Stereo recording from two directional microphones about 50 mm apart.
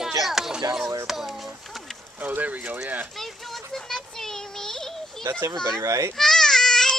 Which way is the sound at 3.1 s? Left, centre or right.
Centre.